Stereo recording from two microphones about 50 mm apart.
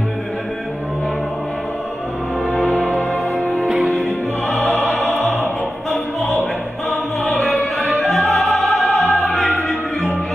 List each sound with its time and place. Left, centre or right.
2.7 s music: left
3.6 s music: centre
7.8 s music: centre